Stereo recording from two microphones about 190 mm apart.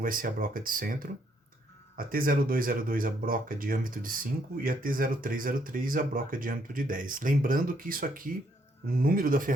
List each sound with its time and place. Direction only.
0.0 s speech: 45° right (ahead or behind)